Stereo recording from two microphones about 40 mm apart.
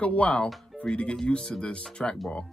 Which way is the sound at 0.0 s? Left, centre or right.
Left.